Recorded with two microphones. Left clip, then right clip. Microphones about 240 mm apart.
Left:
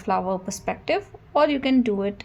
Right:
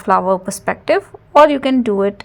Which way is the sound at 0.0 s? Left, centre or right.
Right.